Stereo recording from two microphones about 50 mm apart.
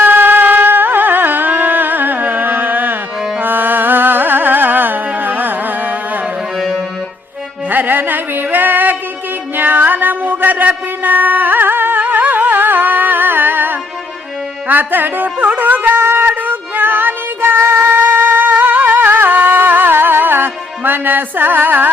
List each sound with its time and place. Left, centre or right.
0.0 s music: right
7.7 s music: right